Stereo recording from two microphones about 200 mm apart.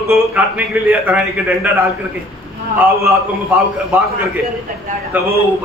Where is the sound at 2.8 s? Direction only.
15° right (ahead or behind).